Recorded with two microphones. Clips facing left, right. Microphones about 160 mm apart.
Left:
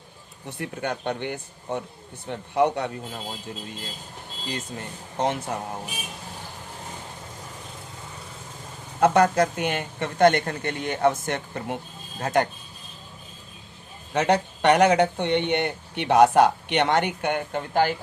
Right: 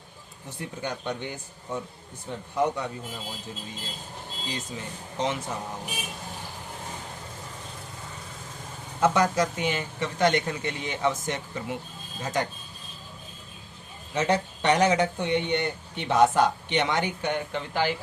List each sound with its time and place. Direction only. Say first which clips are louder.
0.6 s speech: left 4 dB; 60° left (ahead or behind)
4.4 s speech: left 3 dB; 55° left (ahead or behind)
9.0 s speech: left 4 dB; 60° left (ahead or behind)
14.1 s speech: left 3 dB; 65° left (ahead or behind); by 17.9 s 50° left (ahead or behind)